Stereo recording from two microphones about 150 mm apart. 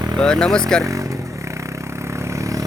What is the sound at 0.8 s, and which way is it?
Vehicle, 20° right (ahead or behind).